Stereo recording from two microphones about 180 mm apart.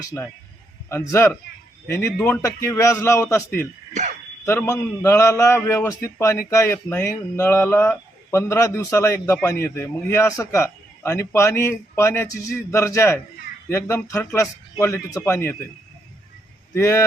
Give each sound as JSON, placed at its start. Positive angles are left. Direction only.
{"t": 0.0, "sound": "a man's voice", "side_deg": 20}
{"t": 16.7, "sound": "a man's voice", "side_deg": 15}